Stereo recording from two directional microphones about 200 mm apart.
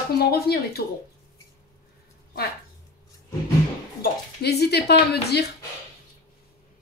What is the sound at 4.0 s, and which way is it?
Speech, 55° left (ahead or behind).